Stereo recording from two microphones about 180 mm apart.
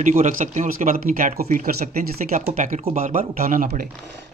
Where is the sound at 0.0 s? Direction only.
45° right (ahead or behind).